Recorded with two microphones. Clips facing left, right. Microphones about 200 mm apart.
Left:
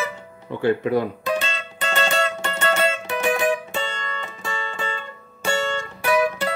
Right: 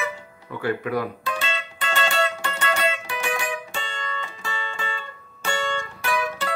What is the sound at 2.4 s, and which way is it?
Music, 25° left (ahead or behind).